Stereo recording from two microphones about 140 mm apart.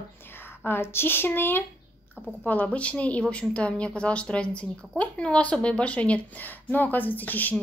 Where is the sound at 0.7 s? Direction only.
15° left (ahead or behind).